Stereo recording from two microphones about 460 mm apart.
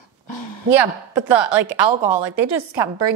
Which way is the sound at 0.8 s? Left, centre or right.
Right.